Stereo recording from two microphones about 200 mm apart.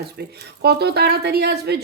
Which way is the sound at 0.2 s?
55° right (ahead or behind).